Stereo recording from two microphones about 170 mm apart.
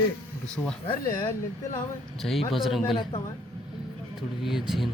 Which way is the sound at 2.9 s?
35° left (ahead or behind).